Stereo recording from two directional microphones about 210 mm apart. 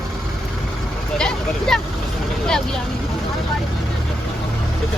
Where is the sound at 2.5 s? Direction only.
Centre (ahead or behind).